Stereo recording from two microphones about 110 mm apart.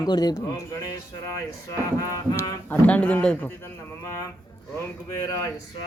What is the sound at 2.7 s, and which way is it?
Speech, 15° left (ahead or behind).